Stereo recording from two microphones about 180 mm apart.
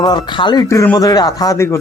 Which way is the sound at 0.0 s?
25° left (ahead or behind).